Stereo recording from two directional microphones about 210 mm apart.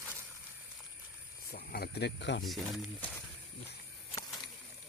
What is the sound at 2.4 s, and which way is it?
Speech, centre (ahead or behind).